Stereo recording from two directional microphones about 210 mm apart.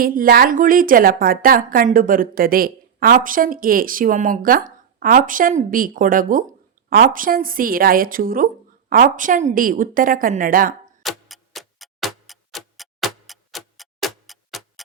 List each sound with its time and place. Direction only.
0.0 s a woman's voice: 45° right (ahead or behind)
11.0 s tick-tock: centre (ahead or behind)